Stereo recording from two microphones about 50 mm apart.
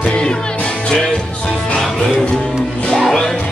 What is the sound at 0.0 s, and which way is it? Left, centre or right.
Music, centre.